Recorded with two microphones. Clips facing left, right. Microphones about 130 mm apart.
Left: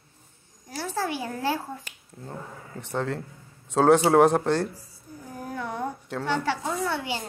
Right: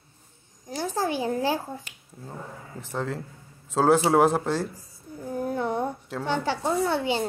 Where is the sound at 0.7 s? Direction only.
20° right (ahead or behind).